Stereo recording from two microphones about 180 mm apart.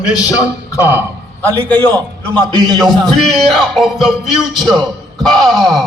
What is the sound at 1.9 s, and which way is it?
Speech, 25° right (ahead or behind).